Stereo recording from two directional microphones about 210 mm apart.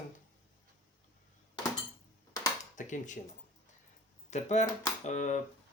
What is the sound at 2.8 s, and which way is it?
Speech, 35° left (ahead or behind).